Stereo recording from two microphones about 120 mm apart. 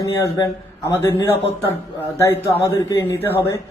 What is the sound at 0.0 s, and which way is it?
Speech, 25° left (ahead or behind).